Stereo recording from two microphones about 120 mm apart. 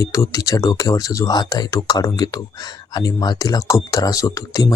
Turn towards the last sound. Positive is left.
turn(degrees=30)  # may be behind; listen again after turning